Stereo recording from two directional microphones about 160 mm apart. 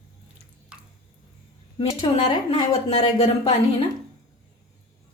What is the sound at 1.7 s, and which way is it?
Speech, 30° left (ahead or behind).